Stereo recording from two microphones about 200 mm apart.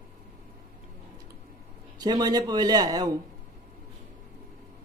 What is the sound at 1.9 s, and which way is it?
A man's voice, 20° right (ahead or behind).